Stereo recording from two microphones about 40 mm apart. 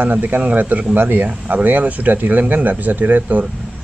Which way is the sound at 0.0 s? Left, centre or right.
Right.